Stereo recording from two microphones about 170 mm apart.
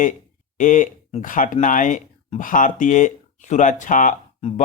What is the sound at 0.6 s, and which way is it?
Speech, 50° left (ahead or behind).